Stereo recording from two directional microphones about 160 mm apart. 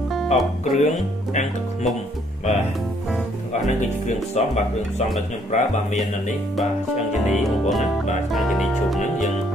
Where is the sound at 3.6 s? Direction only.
50° left (ahead or behind).